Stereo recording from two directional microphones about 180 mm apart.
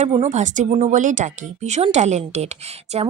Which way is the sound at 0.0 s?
35° right (ahead or behind).